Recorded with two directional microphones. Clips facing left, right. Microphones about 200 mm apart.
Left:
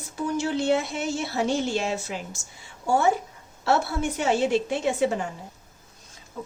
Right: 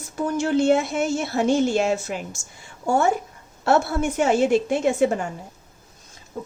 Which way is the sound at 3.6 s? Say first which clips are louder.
Right 4 dB; 50° right (ahead or behind).